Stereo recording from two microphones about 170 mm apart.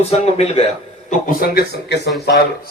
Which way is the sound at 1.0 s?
55° left (ahead or behind).